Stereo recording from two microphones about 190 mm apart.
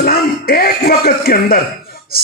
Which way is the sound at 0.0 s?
50° left (ahead or behind).